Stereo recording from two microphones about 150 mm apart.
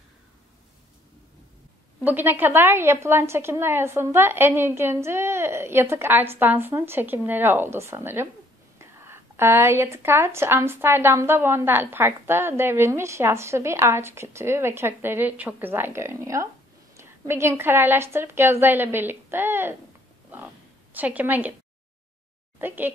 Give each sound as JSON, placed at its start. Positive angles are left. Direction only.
{"t": 2.0, "sound": "speech", "side_deg": -15}
{"t": 20.9, "sound": "speech", "side_deg": -10}
{"t": 22.6, "sound": "speech", "side_deg": -15}